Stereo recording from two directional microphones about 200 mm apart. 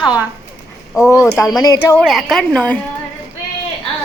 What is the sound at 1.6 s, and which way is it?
Speech, 15° left (ahead or behind).